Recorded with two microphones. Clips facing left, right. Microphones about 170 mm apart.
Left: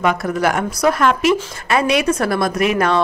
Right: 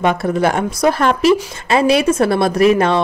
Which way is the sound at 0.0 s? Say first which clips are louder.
Right 2 dB; 25° right (ahead or behind).